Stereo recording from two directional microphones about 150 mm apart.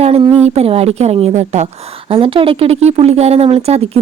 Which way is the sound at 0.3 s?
45° right (ahead or behind).